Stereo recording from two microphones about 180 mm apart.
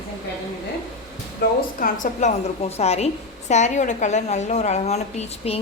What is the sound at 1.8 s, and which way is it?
A woman's voice, 45° left (ahead or behind).